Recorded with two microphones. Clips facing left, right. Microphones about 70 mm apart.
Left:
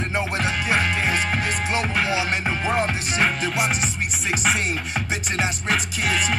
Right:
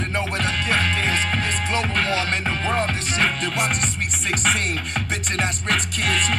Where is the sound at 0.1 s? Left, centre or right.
Centre.